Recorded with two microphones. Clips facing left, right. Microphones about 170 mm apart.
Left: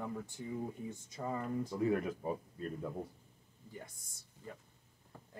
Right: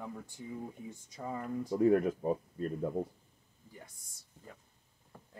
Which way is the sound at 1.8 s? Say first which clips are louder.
Right 8 dB; 45° right (ahead or behind).